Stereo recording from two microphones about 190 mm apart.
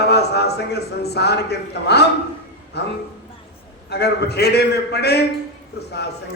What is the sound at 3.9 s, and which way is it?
A man's voice, 60° left (ahead or behind).